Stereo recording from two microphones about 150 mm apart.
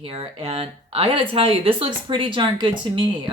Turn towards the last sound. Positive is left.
turn(degrees=-35)  # may be behind; listen again after turning